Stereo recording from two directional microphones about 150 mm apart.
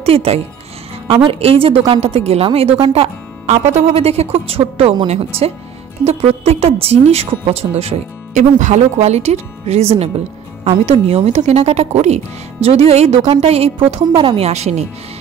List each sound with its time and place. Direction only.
0.0 s a woman's voice: 40° right (ahead or behind)
8.4 s a woman's voice: 55° right (ahead or behind)